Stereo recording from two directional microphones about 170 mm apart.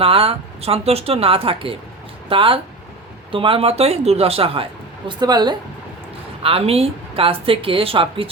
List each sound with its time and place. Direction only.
0.0 s speech: 35° right (ahead or behind)
6.4 s speech: 35° right (ahead or behind)